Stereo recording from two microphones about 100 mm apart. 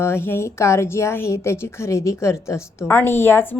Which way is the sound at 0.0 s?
25° left (ahead or behind).